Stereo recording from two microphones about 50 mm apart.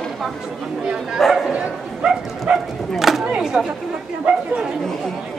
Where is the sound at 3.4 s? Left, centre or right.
Centre.